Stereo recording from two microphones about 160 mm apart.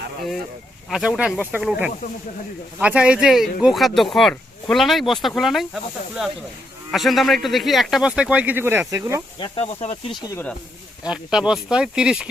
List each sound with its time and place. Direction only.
0.9 s speech: centre (ahead or behind); by 9.2 s 20° right (ahead or behind)
9.4 s speech: 40° left (ahead or behind)
11.1 s speech: 5° right (ahead or behind)